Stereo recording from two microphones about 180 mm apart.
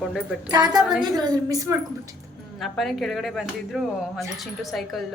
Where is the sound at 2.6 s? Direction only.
Centre (ahead or behind).